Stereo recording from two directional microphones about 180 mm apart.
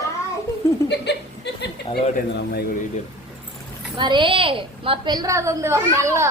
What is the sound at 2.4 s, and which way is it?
Speech, 65° left (ahead or behind).